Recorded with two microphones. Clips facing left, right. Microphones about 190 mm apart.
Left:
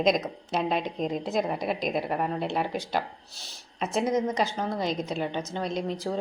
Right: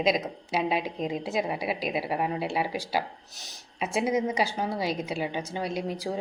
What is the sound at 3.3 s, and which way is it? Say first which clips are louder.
Speech: even; 20° right (ahead or behind).